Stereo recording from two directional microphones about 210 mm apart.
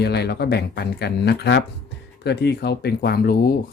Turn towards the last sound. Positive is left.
turn(degrees=45)  # may be behind; listen again after turning